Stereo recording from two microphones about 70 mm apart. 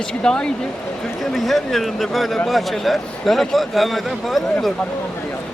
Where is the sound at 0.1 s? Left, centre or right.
Centre.